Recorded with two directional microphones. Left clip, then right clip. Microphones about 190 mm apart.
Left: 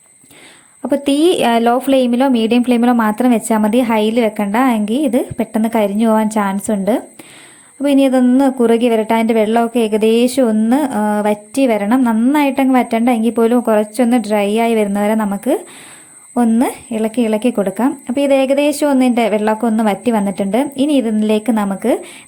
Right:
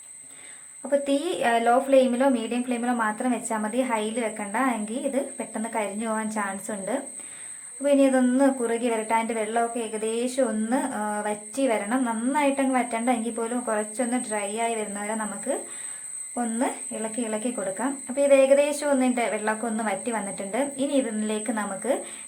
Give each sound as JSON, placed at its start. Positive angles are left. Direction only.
{"t": 0.8, "sound": "a woman's voice", "side_deg": 40}